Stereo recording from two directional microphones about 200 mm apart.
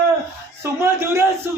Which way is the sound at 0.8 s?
10° right (ahead or behind).